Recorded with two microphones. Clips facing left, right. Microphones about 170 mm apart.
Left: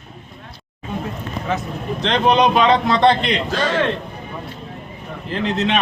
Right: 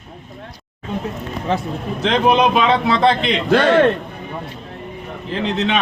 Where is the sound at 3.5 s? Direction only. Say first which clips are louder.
Right 10 dB; 60° right (ahead or behind).